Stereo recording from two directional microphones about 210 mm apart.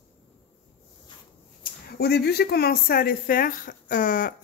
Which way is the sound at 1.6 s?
50° left (ahead or behind).